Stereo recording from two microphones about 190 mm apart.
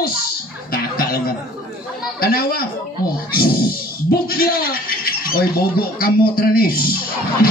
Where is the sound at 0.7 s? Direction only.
50° left (ahead or behind).